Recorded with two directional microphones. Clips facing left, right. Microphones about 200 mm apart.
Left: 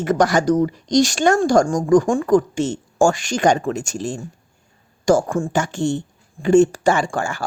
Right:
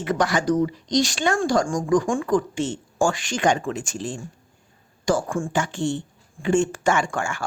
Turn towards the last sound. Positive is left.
turn(degrees=35)  # may be behind; listen again after turning